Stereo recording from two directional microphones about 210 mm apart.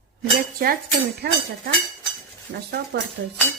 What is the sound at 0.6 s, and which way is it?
Speech, 45° right (ahead or behind).